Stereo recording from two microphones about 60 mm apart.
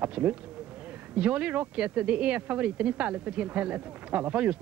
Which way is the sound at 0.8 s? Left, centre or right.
Right.